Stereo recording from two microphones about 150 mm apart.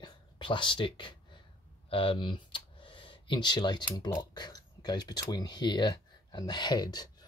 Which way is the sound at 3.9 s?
25° left (ahead or behind).